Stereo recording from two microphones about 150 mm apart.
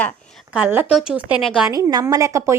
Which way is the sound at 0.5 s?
10° right (ahead or behind).